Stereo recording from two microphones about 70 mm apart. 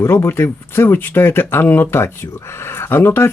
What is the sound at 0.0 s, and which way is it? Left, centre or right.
Speech, left.